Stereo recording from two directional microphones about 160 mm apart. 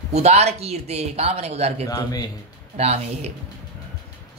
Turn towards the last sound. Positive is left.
turn(degrees=-40)  # may be behind; listen again after turning